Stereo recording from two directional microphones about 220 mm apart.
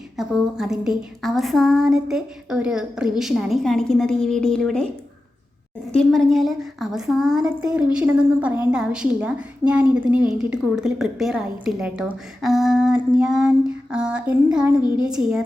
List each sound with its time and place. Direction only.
0.2 s a woman's voice: centre (ahead or behind)
5.9 s a woman's voice: centre (ahead or behind)